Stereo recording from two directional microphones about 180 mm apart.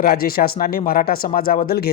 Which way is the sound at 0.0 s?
55° left (ahead or behind).